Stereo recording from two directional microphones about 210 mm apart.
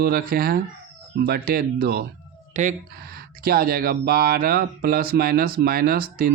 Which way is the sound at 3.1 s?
45° right (ahead or behind).